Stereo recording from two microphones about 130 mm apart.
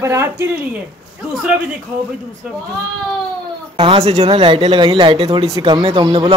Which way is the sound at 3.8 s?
45° right (ahead or behind).